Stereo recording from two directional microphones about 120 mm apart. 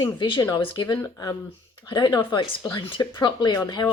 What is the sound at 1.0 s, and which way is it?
A woman's voice, 30° left (ahead or behind).